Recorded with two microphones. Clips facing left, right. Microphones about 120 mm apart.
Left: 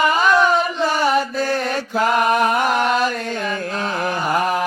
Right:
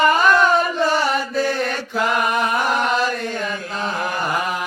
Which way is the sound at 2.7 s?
Centre (ahead or behind).